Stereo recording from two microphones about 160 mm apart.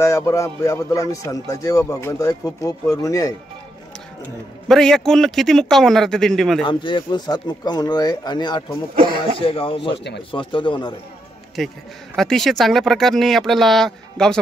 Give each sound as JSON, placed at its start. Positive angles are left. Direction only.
{"t": 0.0, "sound": "speech", "side_deg": 20}
{"t": 4.6, "sound": "speech", "side_deg": 5}
{"t": 6.6, "sound": "speech", "side_deg": 30}
{"t": 9.9, "sound": "speech", "side_deg": 90}
{"t": 10.3, "sound": "speech", "side_deg": 30}
{"t": 11.6, "sound": "speech", "side_deg": 0}